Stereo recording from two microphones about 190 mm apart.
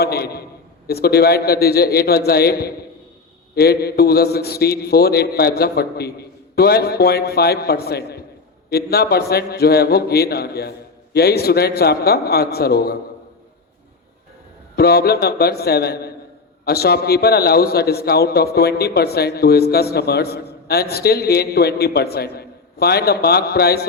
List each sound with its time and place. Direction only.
0.0 s a sound: 55° left (ahead or behind)
0.9 s a man's voice: 55° left (ahead or behind)
14.8 s a man's voice: 55° left (ahead or behind)